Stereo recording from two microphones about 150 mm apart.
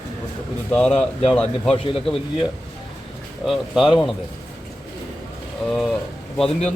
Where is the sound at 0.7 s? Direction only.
5° left (ahead or behind).